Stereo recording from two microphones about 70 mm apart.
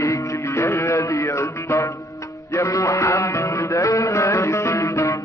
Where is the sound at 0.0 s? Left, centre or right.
Left.